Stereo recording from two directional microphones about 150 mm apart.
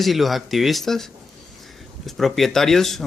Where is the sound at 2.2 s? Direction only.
Centre (ahead or behind).